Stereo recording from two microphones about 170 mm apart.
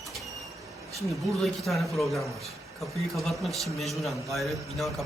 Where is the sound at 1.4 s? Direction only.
Centre (ahead or behind).